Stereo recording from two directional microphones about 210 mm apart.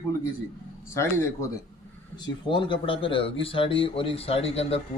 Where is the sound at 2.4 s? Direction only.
25° left (ahead or behind).